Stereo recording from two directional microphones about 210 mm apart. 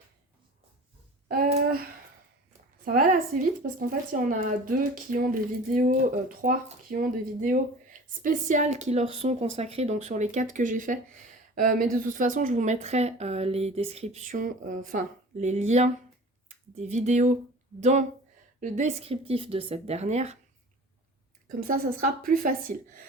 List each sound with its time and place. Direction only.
1.3 s a sound: 45° right (ahead or behind)
2.8 s speech: 40° right (ahead or behind)
21.7 s speech: 40° right (ahead or behind)